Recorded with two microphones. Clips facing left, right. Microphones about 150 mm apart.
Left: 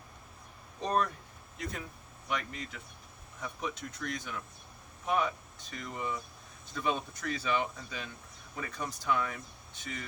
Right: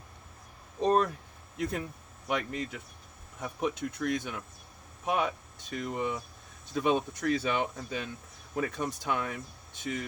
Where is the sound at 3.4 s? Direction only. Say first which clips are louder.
Right 6 dB; 55° right (ahead or behind).